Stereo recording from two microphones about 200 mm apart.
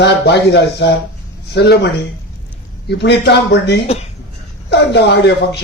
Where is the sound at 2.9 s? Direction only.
55° left (ahead or behind).